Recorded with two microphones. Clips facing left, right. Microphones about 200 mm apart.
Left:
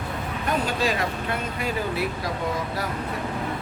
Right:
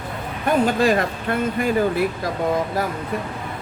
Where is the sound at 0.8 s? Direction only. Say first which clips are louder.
Right 6 dB; 50° right (ahead or behind).